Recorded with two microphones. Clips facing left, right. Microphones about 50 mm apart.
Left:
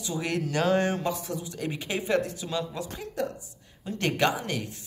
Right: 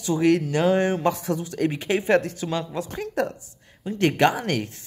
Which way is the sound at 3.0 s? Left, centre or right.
Right.